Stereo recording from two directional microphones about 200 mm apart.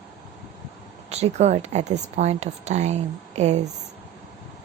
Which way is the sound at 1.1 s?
30° right (ahead or behind).